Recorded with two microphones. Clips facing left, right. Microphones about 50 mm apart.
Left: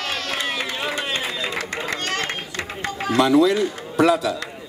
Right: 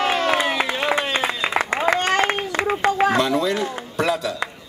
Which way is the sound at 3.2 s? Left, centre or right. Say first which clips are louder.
Left 4 dB; centre.